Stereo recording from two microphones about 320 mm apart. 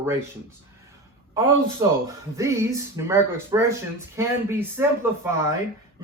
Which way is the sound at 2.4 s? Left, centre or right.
Centre.